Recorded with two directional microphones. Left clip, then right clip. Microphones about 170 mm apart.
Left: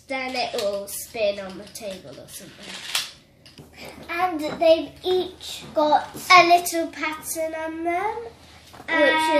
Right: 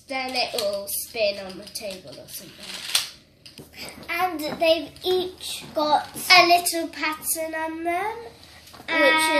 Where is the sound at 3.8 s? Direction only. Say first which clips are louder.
Even; 5° right (ahead or behind).